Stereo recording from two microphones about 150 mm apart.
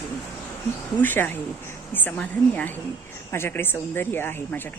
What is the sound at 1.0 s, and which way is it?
A woman's voice, 15° left (ahead or behind).